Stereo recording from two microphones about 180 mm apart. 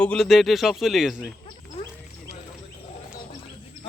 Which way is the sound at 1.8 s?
30° left (ahead or behind).